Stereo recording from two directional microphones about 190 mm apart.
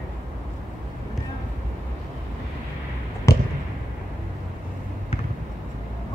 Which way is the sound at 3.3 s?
15° left (ahead or behind).